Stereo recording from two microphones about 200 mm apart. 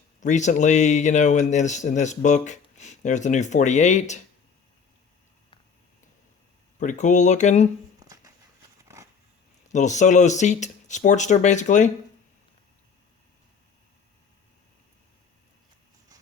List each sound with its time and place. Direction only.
0.2 s speech: 35° left (ahead or behind)
6.7 s speech: 40° left (ahead or behind)
7.9 s a sound: 20° right (ahead or behind)
9.6 s speech: 35° left (ahead or behind)